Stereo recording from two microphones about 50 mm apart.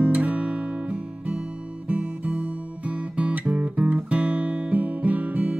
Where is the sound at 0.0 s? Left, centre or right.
Right.